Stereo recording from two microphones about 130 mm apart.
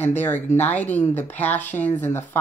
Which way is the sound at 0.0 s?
15° left (ahead or behind).